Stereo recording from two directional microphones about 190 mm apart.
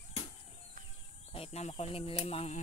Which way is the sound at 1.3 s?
35° left (ahead or behind).